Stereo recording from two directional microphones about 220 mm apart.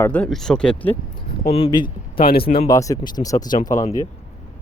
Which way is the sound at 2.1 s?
45° left (ahead or behind).